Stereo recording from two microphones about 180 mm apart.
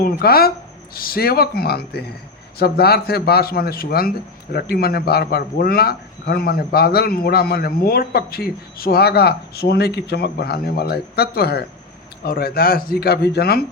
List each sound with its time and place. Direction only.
0.0 s a man's voice: 55° left (ahead or behind)